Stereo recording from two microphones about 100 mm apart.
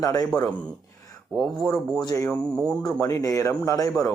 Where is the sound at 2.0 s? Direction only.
35° left (ahead or behind).